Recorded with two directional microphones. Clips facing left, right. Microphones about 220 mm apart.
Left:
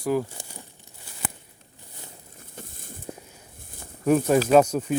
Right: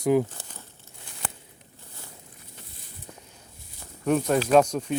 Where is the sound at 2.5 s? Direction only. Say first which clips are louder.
Left 11 dB; 50° left (ahead or behind).